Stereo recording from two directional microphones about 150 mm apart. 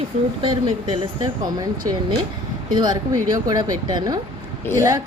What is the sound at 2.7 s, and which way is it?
Speech, 30° right (ahead or behind).